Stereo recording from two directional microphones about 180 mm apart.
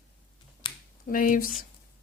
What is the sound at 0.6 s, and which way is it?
Finger snapping, 25° left (ahead or behind).